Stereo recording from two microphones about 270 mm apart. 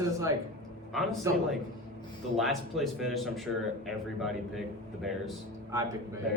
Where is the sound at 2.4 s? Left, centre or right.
Centre.